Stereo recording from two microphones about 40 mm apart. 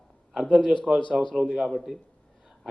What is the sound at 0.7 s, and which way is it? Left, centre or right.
Speech, right.